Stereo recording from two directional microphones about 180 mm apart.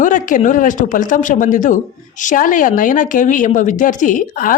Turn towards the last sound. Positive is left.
turn(degrees=45)  # may be behind; listen again after turning